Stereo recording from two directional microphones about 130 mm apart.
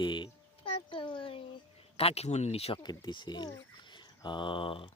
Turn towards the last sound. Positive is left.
turn(degrees=40)  # may be behind; listen again after turning